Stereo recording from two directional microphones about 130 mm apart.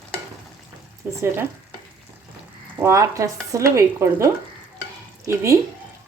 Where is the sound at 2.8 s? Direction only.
25° right (ahead or behind).